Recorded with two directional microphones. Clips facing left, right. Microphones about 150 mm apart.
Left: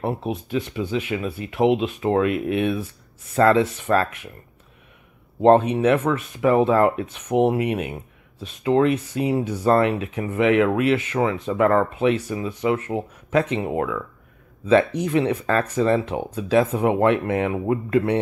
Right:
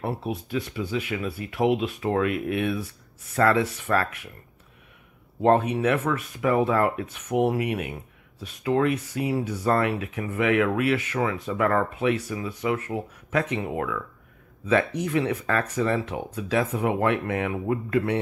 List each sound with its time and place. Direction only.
0.0 s speech: 25° left (ahead or behind)
5.4 s speech: 25° left (ahead or behind)